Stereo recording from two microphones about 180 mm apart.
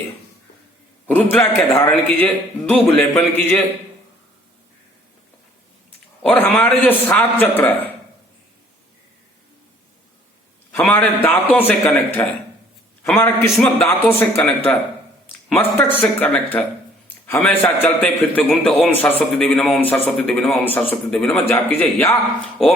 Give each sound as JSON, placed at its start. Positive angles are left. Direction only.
{"t": 1.0, "sound": "a man's voice", "side_deg": 10}
{"t": 6.2, "sound": "a man's voice", "side_deg": 10}
{"t": 10.7, "sound": "a man's voice", "side_deg": 10}